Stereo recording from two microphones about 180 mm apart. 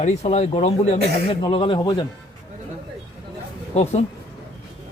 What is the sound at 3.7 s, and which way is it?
Speech, 35° left (ahead or behind).